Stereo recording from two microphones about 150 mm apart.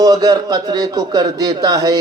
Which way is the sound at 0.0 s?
25° right (ahead or behind).